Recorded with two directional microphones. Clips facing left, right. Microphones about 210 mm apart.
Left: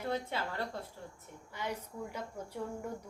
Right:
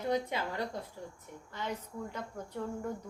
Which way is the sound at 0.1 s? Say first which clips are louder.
Right 4 dB; 15° right (ahead or behind).